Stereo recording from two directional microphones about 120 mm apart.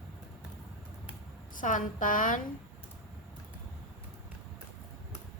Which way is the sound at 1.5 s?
90° left.